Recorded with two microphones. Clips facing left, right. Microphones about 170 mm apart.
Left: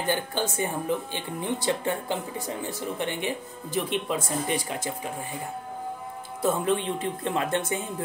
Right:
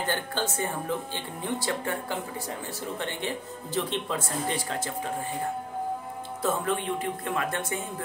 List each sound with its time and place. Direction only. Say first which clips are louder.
0.0 s speech: left 2 dB; 15° left (ahead or behind)
6.4 s speech: left 3 dB; 20° left (ahead or behind)